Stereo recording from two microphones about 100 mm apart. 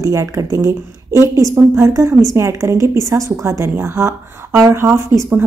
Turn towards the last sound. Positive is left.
turn(degrees=-30)  # may be behind; listen again after turning